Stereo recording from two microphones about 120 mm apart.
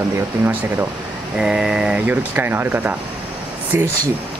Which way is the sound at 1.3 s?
5° right (ahead or behind).